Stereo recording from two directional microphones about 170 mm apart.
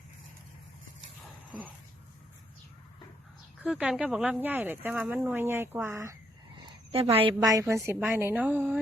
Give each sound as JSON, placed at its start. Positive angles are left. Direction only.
{"t": 3.6, "sound": "speech", "side_deg": -5}
{"t": 6.9, "sound": "a woman's voice", "side_deg": -35}
{"t": 7.4, "sound": "speech", "side_deg": -20}